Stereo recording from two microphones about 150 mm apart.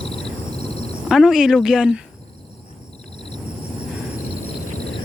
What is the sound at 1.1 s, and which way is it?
Speech, 5° right (ahead or behind).